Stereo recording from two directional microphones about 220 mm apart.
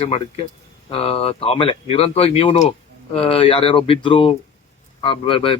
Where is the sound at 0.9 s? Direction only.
25° left (ahead or behind).